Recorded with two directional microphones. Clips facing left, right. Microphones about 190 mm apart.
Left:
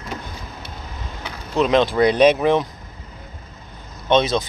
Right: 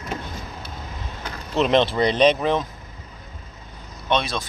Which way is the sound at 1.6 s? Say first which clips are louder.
Left 2 dB; centre (ahead or behind).